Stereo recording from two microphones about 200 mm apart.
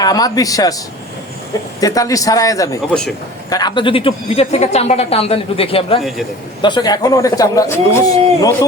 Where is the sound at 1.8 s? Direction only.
15° left (ahead or behind).